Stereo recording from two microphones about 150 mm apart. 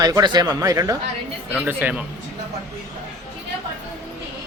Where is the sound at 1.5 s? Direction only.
10° right (ahead or behind).